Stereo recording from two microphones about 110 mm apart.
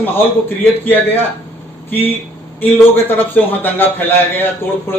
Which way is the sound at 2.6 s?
20° left (ahead or behind).